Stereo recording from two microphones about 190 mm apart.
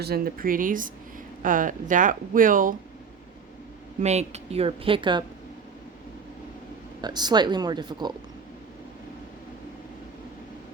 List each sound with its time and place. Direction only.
0.0 s speech: 50° right (ahead or behind)
4.0 s speech: 35° right (ahead or behind)
7.0 s speech: 20° right (ahead or behind)